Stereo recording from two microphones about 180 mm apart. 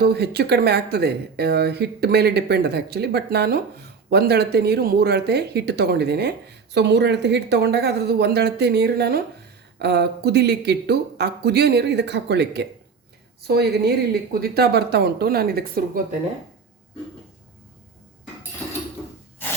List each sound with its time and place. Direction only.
0.0 s speech: 65° right (ahead or behind)